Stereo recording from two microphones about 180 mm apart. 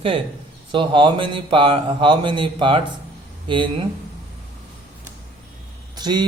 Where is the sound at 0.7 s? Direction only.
25° right (ahead or behind).